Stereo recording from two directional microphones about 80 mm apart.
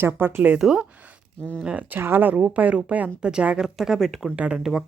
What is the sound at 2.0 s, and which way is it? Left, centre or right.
Speech, right.